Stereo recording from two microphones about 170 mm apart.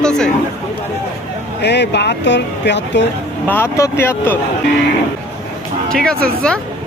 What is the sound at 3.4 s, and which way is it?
Speech, 15° left (ahead or behind).